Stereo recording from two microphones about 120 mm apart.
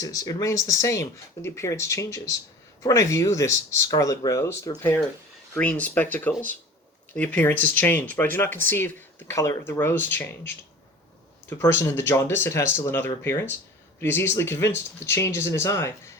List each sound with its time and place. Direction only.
0.0 s speech: 30° left (ahead or behind)
5.5 s speech: 10° left (ahead or behind)